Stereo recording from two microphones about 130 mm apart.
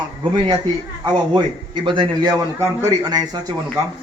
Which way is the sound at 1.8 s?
40° right (ahead or behind).